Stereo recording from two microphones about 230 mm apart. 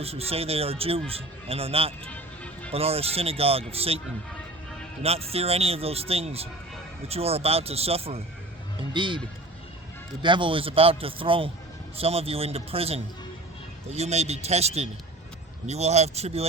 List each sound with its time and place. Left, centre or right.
0.0 s a man's voice: right
2.1 s music: centre
2.7 s a man's voice: right
5.0 s a man's voice: right
10.2 s a man's voice: right